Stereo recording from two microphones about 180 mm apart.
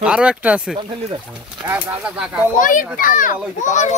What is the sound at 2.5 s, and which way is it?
A child's voice, 50° left (ahead or behind).